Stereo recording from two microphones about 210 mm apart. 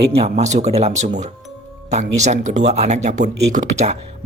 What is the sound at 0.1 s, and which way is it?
Speech, 30° right (ahead or behind).